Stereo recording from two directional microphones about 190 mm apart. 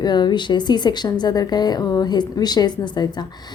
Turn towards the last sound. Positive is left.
turn(degrees=20)  # may be behind; listen again after turning